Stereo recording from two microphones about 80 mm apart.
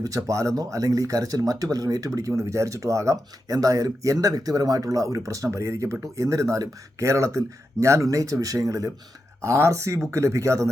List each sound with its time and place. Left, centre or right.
0.2 s speech: right